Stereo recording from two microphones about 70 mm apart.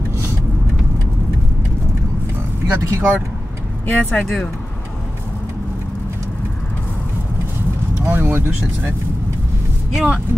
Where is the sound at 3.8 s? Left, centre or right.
Left.